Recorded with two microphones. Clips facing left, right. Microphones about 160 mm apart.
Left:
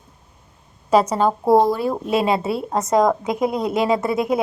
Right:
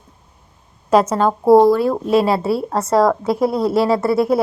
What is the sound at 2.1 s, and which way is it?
Speech, 20° left (ahead or behind).